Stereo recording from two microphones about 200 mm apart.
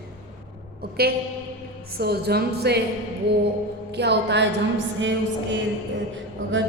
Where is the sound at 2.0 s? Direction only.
50° right (ahead or behind).